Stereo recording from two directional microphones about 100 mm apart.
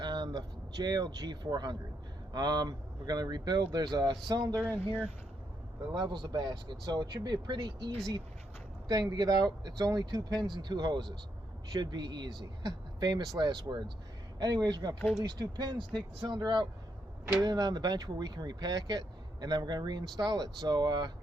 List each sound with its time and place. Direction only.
0.0 s speech: 45° right (ahead or behind)
4.6 s speech: 20° left (ahead or behind)
5.9 s speech: 50° right (ahead or behind)